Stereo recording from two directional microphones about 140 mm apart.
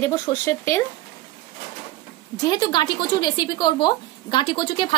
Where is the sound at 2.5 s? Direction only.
30° left (ahead or behind).